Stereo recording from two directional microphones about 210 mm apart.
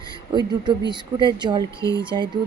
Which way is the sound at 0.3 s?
20° right (ahead or behind).